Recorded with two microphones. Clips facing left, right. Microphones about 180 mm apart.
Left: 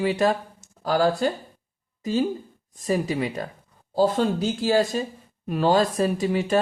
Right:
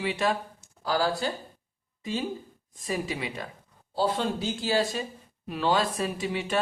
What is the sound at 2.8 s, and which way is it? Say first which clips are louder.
Speech: left 7 dB; 45° left (ahead or behind).